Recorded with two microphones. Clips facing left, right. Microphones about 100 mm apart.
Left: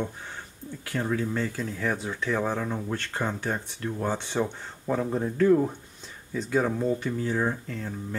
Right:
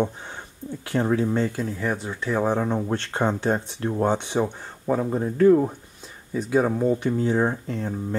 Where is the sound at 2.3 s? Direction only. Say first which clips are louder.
Right 9 dB; 25° right (ahead or behind).